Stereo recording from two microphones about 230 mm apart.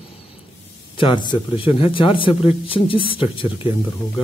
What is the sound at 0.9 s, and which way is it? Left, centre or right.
Speech, left.